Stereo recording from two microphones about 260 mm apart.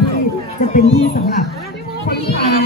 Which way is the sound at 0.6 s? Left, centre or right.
Left.